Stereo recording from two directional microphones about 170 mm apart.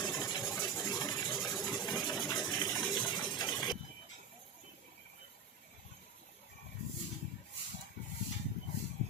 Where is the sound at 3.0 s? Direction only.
5° left (ahead or behind).